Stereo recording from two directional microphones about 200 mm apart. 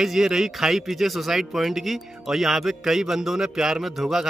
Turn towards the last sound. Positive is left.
turn(degrees=0)  # may be behind; listen again after turning